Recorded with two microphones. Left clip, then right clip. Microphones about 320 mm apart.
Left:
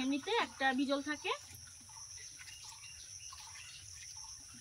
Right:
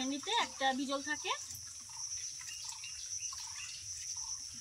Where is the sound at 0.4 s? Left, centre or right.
Centre.